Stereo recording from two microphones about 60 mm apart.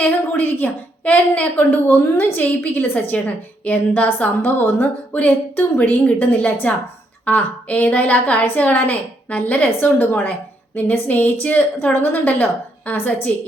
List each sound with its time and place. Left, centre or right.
0.0 s a woman's voice: left
4.4 s a woman's voice: left
5.1 s a woman's voice: left